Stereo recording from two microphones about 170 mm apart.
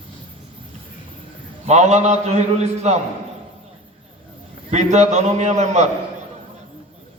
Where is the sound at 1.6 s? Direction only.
40° right (ahead or behind).